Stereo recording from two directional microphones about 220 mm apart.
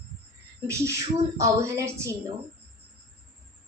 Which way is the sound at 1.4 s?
15° right (ahead or behind).